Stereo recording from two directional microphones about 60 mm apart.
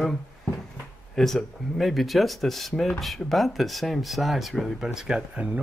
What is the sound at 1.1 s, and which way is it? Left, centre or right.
Speech, centre.